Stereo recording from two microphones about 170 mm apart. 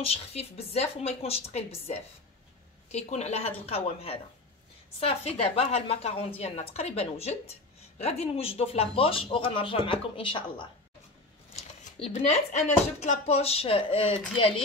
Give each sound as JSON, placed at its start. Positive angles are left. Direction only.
{"t": 0.0, "sound": "speech", "side_deg": 35}
{"t": 11.5, "sound": "speech", "side_deg": 40}